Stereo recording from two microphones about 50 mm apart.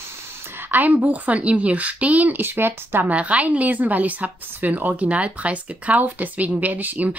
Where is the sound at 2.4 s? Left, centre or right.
Right.